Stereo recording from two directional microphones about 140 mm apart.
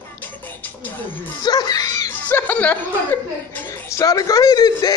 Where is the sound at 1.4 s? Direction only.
30° left (ahead or behind).